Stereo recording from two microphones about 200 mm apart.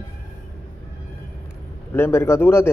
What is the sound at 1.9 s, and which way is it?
Speech, 15° left (ahead or behind).